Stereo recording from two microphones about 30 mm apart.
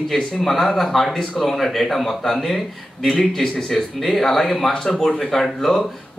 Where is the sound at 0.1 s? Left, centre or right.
Centre.